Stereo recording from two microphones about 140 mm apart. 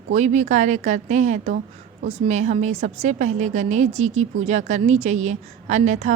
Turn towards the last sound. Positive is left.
turn(degrees=-55)  # may be behind; listen again after turning